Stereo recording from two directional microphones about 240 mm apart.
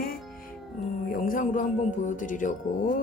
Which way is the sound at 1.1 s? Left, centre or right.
Left.